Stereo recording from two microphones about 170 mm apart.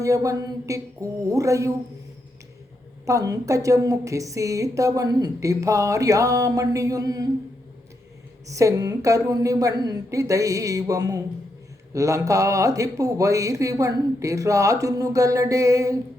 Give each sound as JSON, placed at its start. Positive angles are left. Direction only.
{"t": 0.0, "sound": "a woman's voice", "side_deg": -20}
{"t": 3.1, "sound": "a woman's voice", "side_deg": -20}
{"t": 8.4, "sound": "a woman's voice", "side_deg": -20}